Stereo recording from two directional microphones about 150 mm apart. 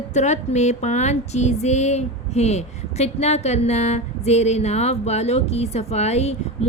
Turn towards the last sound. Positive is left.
turn(degrees=45)  # may be behind; listen again after turning